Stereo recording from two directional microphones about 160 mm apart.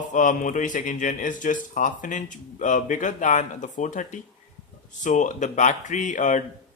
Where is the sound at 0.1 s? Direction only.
55° left (ahead or behind).